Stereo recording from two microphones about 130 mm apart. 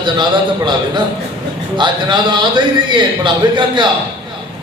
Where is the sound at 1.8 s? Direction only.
35° right (ahead or behind).